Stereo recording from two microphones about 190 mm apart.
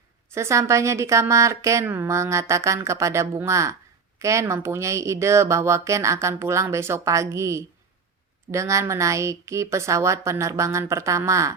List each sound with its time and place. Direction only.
0.3 s a woman's voice: 15° right (ahead or behind)